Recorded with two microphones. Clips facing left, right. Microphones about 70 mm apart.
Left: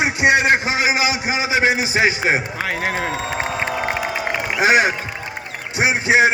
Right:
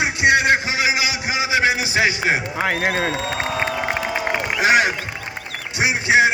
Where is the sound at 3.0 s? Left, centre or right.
Centre.